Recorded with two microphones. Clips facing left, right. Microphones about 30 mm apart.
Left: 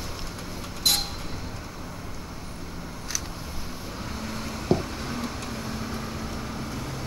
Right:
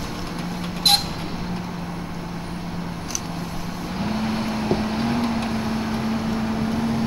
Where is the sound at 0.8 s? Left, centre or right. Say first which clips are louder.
Right 6 dB; right.